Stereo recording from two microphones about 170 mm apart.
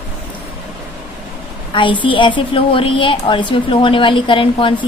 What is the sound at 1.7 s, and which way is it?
A woman's voice, 30° left (ahead or behind).